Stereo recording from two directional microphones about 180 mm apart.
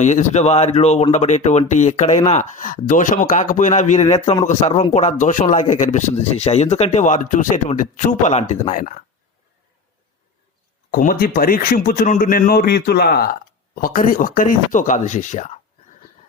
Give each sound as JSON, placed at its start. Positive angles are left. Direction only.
{"t": 0.0, "sound": "speech", "side_deg": 40}
{"t": 10.9, "sound": "speech", "side_deg": 50}
{"t": 13.7, "sound": "speech", "side_deg": 50}